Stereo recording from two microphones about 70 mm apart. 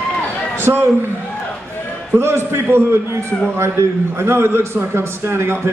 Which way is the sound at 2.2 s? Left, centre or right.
Right.